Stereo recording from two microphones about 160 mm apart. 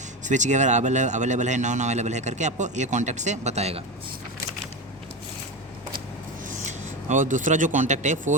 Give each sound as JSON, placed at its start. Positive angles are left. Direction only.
{"t": 0.3, "sound": "speech", "side_deg": -50}
{"t": 6.6, "sound": "speech", "side_deg": -50}